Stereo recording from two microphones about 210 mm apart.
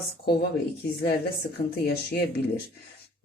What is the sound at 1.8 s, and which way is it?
Speech, 50° left (ahead or behind).